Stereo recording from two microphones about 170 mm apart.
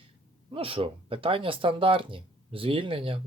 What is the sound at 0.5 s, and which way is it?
Speech, 35° right (ahead or behind).